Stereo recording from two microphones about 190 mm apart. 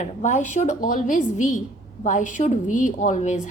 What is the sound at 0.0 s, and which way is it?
A woman's voice, 35° left (ahead or behind).